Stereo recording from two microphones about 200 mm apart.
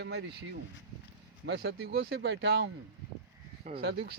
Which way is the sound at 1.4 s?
60° right (ahead or behind).